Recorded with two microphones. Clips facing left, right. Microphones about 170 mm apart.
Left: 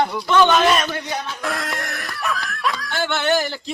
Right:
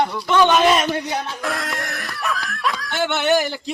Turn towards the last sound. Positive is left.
turn(degrees=-15)  # may be behind; listen again after turning